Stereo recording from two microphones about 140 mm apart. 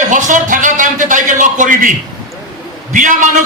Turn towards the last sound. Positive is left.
turn(degrees=-65)  # may be behind; listen again after turning